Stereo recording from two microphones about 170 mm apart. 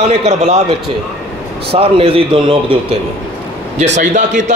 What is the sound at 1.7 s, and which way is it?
A man's voice, 35° right (ahead or behind).